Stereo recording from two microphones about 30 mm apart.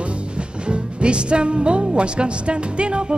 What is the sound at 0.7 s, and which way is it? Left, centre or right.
Speech, right.